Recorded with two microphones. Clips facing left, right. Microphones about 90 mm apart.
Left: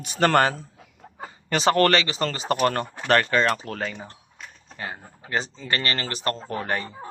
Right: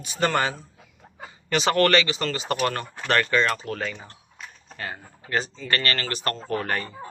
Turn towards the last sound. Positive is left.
turn(degrees=20)  # may be behind; listen again after turning